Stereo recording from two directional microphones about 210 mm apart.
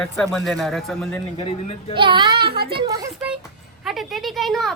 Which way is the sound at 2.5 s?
50° right (ahead or behind).